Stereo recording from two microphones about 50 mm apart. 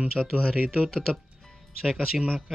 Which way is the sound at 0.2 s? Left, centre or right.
Centre.